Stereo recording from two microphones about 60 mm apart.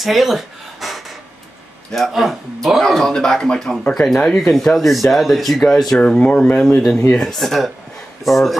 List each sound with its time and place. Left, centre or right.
0.0 s a sound: centre
1.9 s speech: centre
5.9 s speech: centre